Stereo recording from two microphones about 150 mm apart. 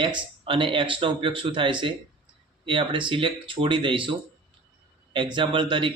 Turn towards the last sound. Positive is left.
turn(degrees=-35)  # may be behind; listen again after turning